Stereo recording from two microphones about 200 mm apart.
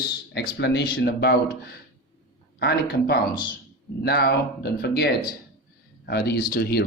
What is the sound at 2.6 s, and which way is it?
Speech, 55° left (ahead or behind).